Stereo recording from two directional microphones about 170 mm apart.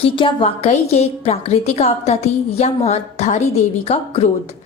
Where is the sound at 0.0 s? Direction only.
30° left (ahead or behind).